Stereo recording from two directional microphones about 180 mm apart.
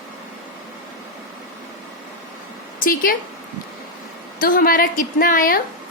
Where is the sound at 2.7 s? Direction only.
50° left (ahead or behind).